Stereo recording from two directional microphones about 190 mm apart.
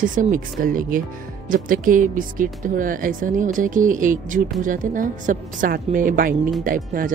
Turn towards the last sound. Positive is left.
turn(degrees=-45)  # may be behind; listen again after turning